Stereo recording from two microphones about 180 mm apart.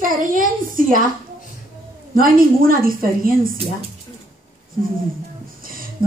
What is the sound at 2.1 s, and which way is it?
Speech, 50° right (ahead or behind).